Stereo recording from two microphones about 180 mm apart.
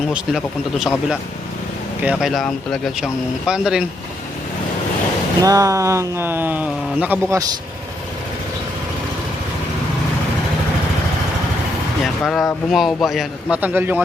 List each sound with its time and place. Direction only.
0.1 s speech: 5° right (ahead or behind)
2.0 s speech: 5° right (ahead or behind)
5.4 s speech: 20° right (ahead or behind)
12.0 s speech: centre (ahead or behind)